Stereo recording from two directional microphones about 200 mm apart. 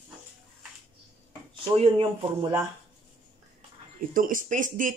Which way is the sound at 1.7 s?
25° right (ahead or behind).